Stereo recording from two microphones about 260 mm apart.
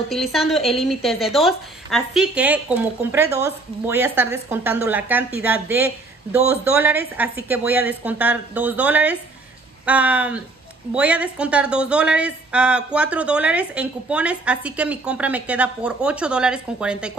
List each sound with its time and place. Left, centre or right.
0.1 s a woman's voice: centre